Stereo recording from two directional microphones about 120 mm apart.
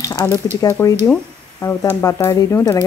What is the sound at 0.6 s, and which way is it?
Speech, 25° left (ahead or behind).